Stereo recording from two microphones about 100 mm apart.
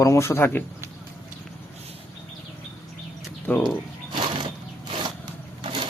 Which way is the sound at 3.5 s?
15° left (ahead or behind).